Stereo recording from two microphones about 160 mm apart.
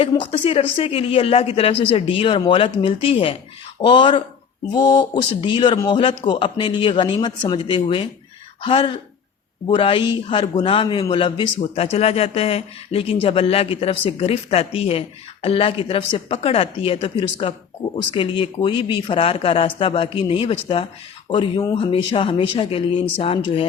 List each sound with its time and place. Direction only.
0.0 s speech: 35° left (ahead or behind)